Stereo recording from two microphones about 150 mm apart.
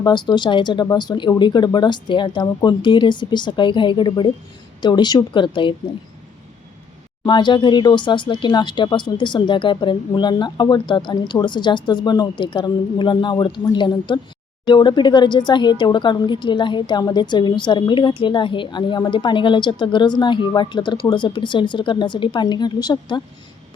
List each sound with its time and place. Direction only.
0.0 s speech: 30° left (ahead or behind)
7.3 s speech: 30° left (ahead or behind)